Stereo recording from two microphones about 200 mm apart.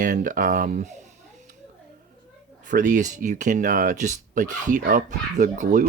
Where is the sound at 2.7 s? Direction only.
40° right (ahead or behind).